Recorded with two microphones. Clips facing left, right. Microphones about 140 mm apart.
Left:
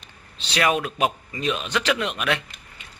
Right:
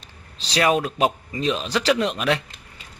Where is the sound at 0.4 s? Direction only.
35° right (ahead or behind).